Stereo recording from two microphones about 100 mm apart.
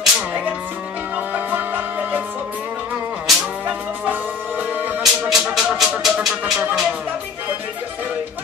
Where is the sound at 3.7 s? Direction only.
15° right (ahead or behind).